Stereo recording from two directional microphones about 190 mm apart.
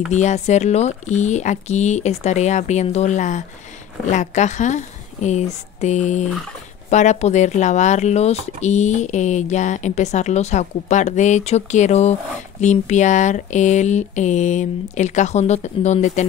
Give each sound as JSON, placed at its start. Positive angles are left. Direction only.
{"t": 0.1, "sound": "speech", "side_deg": 35}